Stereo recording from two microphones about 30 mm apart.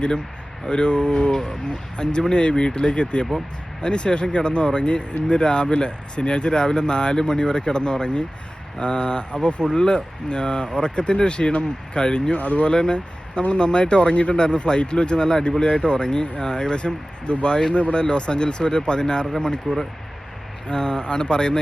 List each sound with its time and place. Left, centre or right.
0.7 s speech: left
12.4 s speech: left
12.6 s speech: left
14.3 s speech: left